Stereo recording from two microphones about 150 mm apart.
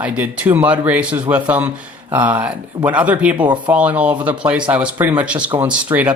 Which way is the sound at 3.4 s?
30° right (ahead or behind).